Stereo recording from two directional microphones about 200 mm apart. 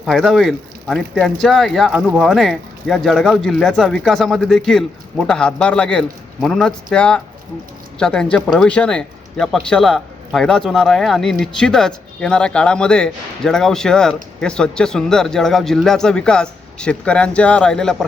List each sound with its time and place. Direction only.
0.0 s speech: centre (ahead or behind)